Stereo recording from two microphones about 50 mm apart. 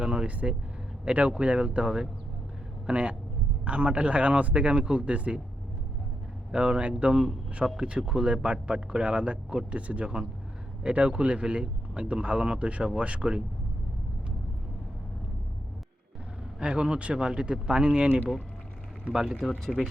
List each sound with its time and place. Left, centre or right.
0.0 s speech: right
6.5 s speech: centre
16.6 s speech: centre
19.1 s speech: centre
19.4 s speech: centre